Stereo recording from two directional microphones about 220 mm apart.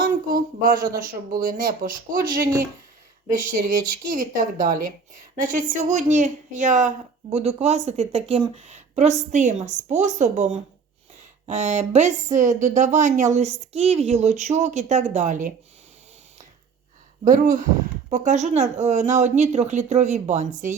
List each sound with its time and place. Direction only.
0.0 s speech: 40° right (ahead or behind)
17.2 s speech: 35° right (ahead or behind)